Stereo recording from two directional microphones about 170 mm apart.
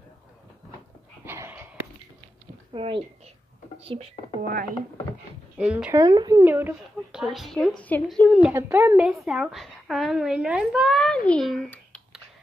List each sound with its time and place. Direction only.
1.2 s a sound: 15° right (ahead or behind)
2.7 s a woman's voice: 30° right (ahead or behind)
4.4 s speech: 60° right (ahead or behind)
5.6 s speech: 5° right (ahead or behind)
5.9 s speech: 25° right (ahead or behind)
6.4 s a woman's voice: 10° right (ahead or behind); by 8.3 s 10° left (ahead or behind)
8.3 s a woman's voice: 5° right (ahead or behind)
8.5 s a woman's voice: 15° right (ahead or behind); by 12.2 s 5° left (ahead or behind)